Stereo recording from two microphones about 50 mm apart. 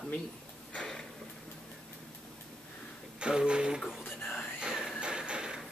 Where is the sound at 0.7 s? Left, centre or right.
Centre.